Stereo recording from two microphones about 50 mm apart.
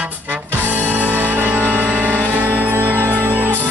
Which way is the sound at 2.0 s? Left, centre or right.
Left.